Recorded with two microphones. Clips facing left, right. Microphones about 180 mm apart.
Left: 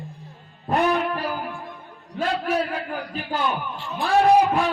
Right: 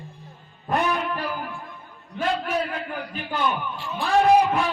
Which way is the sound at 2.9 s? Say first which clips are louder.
Left 2 dB; 45° left (ahead or behind).